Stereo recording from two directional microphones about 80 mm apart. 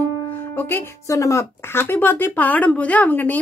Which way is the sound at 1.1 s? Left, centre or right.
Left.